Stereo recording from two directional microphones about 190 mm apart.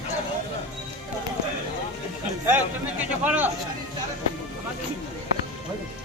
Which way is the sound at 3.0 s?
10° right (ahead or behind).